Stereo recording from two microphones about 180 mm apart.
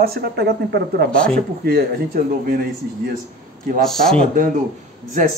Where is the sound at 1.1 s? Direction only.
5° left (ahead or behind).